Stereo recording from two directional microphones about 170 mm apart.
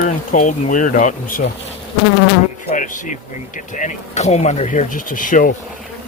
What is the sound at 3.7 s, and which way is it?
Speech, 45° left (ahead or behind).